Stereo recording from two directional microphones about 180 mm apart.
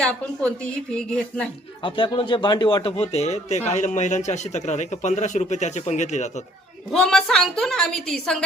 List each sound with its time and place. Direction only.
0.0 s a woman's voice: 5° left (ahead or behind)
1.8 s a man's voice: 30° left (ahead or behind)
6.9 s a woman's voice: 5° left (ahead or behind)